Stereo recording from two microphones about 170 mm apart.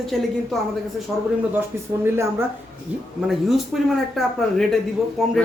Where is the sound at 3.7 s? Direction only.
5° right (ahead or behind).